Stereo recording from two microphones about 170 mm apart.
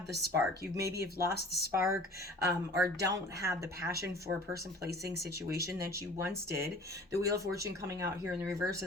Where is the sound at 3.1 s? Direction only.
15° right (ahead or behind).